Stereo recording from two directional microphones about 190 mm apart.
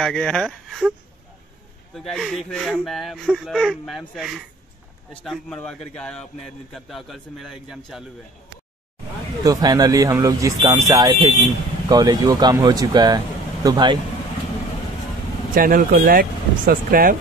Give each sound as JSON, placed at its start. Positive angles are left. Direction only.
{"t": 0.0, "sound": "a man's voice", "side_deg": 5}
{"t": 2.0, "sound": "a man's voice", "side_deg": 0}
{"t": 9.4, "sound": "speech", "side_deg": -20}
{"t": 15.5, "sound": "speech", "side_deg": -50}